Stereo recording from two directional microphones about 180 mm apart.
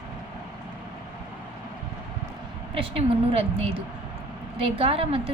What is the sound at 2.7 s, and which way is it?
A woman's voice, 30° right (ahead or behind).